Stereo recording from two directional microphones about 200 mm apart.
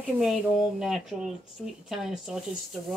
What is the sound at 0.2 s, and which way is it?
Speech, centre (ahead or behind).